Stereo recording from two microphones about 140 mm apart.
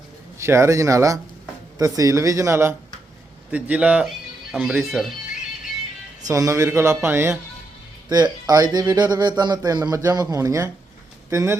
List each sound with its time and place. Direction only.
0.3 s speech: 20° right (ahead or behind); by 5.1 s centre (ahead or behind)
6.2 s speech: 25° right (ahead or behind)
8.1 s speech: 30° right (ahead or behind)